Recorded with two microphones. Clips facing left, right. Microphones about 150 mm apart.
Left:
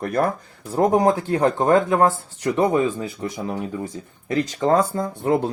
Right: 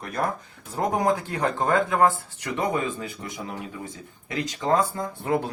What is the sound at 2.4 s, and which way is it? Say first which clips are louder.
Speech: left 7 dB; 25° left (ahead or behind).